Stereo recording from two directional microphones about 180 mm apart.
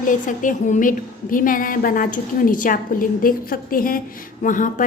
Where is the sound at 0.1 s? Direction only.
45° left (ahead or behind).